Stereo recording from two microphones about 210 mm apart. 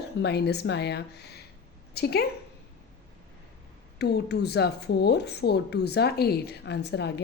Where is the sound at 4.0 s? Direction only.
50° left (ahead or behind).